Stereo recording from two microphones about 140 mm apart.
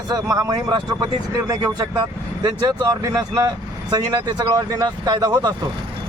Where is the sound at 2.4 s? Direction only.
30° right (ahead or behind).